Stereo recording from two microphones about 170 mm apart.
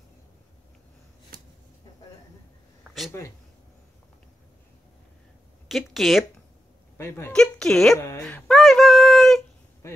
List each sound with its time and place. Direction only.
3.1 s speech: 20° left (ahead or behind)
5.7 s speech: centre (ahead or behind)
7.0 s speech: 15° left (ahead or behind)
9.8 s speech: 15° left (ahead or behind)